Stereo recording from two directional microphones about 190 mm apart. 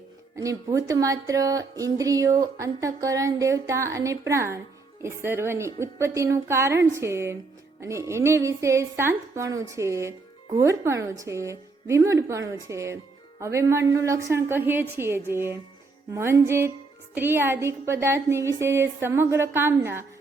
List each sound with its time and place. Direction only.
0.3 s speech: 15° right (ahead or behind)